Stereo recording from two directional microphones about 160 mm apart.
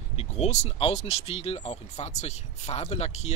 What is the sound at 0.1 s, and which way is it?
Speech, 45° left (ahead or behind).